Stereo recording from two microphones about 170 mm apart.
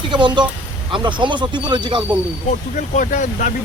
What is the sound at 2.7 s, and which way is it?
Speech, 50° left (ahead or behind).